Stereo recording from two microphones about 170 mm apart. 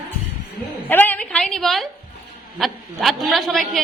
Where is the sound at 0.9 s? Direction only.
10° left (ahead or behind).